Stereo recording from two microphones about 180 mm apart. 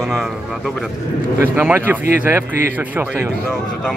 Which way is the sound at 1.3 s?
10° right (ahead or behind).